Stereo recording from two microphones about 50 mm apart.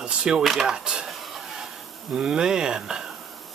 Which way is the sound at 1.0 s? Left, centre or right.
Centre.